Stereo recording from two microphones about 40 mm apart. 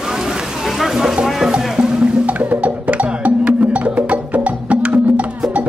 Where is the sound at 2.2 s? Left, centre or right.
Right.